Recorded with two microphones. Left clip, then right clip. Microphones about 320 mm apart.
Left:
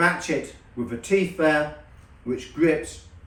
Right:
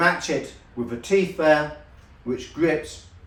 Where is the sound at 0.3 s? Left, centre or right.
Centre.